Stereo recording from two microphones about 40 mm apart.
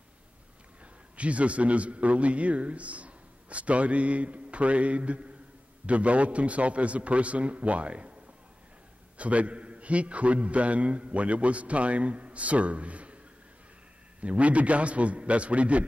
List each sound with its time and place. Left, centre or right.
1.1 s a man's voice: right
9.2 s a man's voice: right
14.2 s a man's voice: right